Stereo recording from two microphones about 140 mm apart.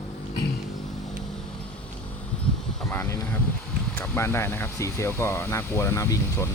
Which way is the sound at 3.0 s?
20° left (ahead or behind).